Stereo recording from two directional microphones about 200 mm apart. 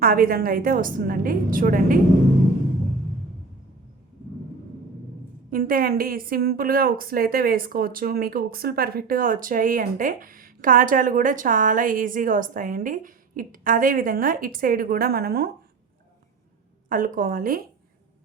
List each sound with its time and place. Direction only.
0.0 s a woman's voice: 45° right (ahead or behind)
5.5 s a woman's voice: 45° right (ahead or behind)
16.9 s a woman's voice: 45° right (ahead or behind)